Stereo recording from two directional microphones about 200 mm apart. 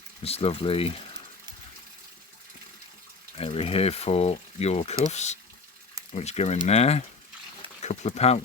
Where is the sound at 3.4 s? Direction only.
30° left (ahead or behind).